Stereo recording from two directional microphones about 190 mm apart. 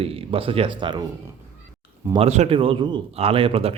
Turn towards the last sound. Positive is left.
turn(degrees=-30)  # may be behind; listen again after turning